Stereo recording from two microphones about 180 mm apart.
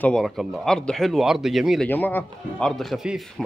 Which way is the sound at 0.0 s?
Centre (ahead or behind).